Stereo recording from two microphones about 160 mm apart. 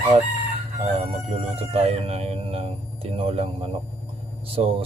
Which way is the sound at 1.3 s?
40° right (ahead or behind).